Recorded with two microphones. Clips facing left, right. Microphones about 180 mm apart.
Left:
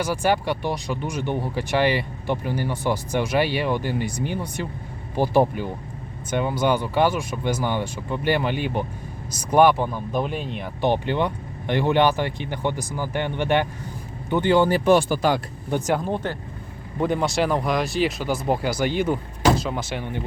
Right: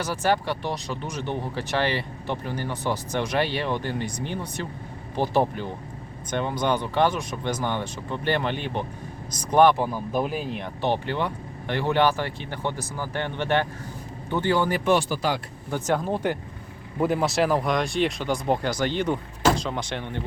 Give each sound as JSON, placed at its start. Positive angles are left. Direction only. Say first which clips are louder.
{"t": 0.0, "sound": "speech", "louder": "left 2 dB", "side_deg": 10}
{"t": 9.7, "sound": "speech", "louder": "left 1 dB", "side_deg": -5}
{"t": 10.8, "sound": "speech", "louder": "left 4 dB", "side_deg": 15}
{"t": 14.8, "sound": "speech", "louder": "left 4 dB", "side_deg": 50}
{"t": 15.9, "sound": "speech", "louder": "right 2 dB", "side_deg": 0}